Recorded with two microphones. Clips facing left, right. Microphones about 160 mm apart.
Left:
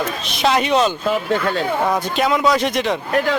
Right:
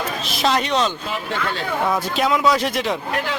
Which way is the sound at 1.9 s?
Centre (ahead or behind).